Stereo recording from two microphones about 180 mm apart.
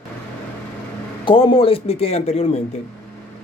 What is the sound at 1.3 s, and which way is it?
A man's voice, 25° left (ahead or behind).